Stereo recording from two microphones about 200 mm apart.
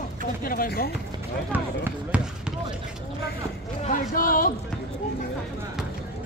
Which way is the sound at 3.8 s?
45° left (ahead or behind).